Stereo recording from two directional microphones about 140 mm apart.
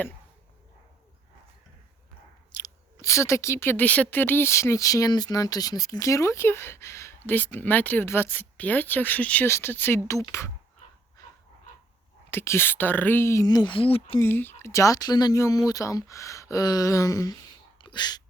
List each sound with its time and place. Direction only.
2.6 s speech: 25° left (ahead or behind)
12.3 s speech: 15° left (ahead or behind); by 14.2 s 40° left (ahead or behind)
14.2 s speech: 15° left (ahead or behind); by 18.2 s 30° left (ahead or behind)